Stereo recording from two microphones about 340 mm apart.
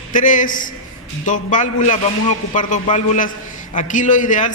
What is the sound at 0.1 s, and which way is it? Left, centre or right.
A man's voice, left.